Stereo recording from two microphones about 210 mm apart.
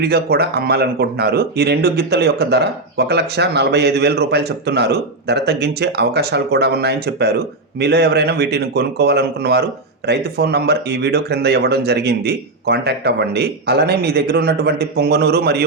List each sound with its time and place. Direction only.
0.0 s speech: 50° right (ahead or behind)